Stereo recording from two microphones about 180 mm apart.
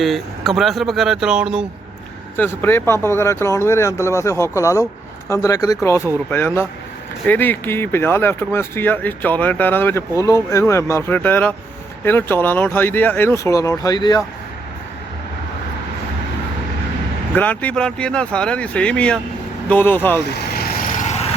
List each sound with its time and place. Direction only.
0.0 s speech: centre (ahead or behind)
2.3 s speech: 10° left (ahead or behind)
17.3 s speech: 10° left (ahead or behind)
20.3 s vehicle: 60° left (ahead or behind); by 21.2 s 40° left (ahead or behind)